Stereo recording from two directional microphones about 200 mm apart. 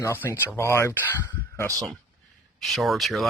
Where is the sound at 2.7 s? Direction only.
Centre (ahead or behind).